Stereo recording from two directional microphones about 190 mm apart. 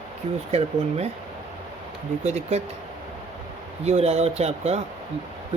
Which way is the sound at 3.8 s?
35° right (ahead or behind).